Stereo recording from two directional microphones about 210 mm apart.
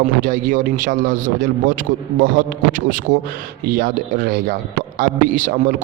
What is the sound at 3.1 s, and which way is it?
A man's voice, 40° right (ahead or behind).